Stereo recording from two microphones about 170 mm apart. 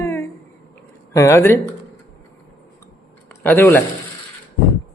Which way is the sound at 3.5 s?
10° left (ahead or behind).